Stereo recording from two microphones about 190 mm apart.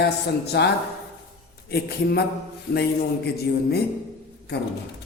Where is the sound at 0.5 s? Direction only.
60° left (ahead or behind).